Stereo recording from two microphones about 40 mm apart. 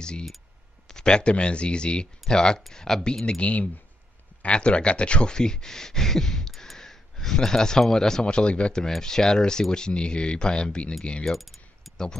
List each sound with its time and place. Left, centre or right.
0.8 s speech: centre
3.3 s speech: left
8.8 s speech: centre
11.3 s mechanisms: centre